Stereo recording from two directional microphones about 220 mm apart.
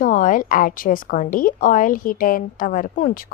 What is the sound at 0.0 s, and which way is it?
A woman's voice, 35° left (ahead or behind).